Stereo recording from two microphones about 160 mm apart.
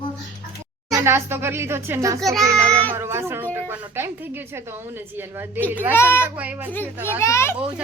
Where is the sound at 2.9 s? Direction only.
15° right (ahead or behind).